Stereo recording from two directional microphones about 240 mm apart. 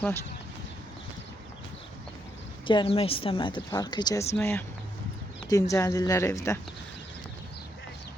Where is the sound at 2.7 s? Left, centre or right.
Left.